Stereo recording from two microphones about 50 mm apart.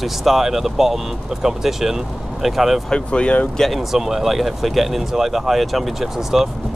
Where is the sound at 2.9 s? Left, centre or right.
Left.